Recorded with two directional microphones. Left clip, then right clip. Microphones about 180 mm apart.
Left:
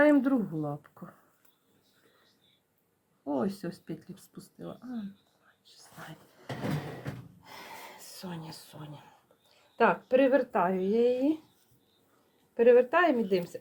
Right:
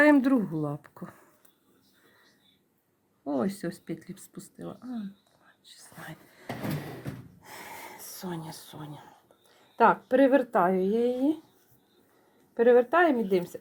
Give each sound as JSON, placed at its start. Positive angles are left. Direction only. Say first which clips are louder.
{"t": 0.0, "sound": "speech", "louder": "right 3 dB", "side_deg": -60}
{"t": 3.2, "sound": "speech", "louder": "right 2 dB", "side_deg": -45}
{"t": 7.4, "sound": "a sound", "louder": "right 3 dB", "side_deg": -45}
{"t": 10.9, "sound": "speech", "louder": "left 1 dB", "side_deg": -20}
{"t": 12.5, "sound": "speech", "louder": "right 1 dB", "side_deg": -25}